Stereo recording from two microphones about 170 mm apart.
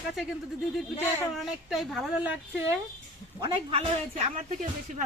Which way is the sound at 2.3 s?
10° right (ahead or behind).